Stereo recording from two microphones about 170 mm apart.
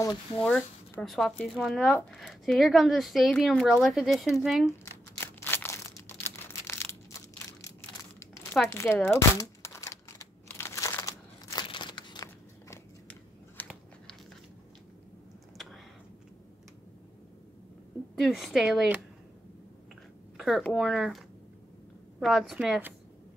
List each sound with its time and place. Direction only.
0.4 s speech: 5° left (ahead or behind)
5.2 s crushing: 15° left (ahead or behind)
8.6 s speech: 15° left (ahead or behind)
9.3 s crumpling: 15° left (ahead or behind)
15.5 s a sound: centre (ahead or behind)
18.1 s speech: centre (ahead or behind)
20.3 s speech: centre (ahead or behind)
22.2 s speech: centre (ahead or behind)